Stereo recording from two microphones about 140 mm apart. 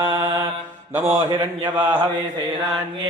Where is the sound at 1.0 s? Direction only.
20° right (ahead or behind).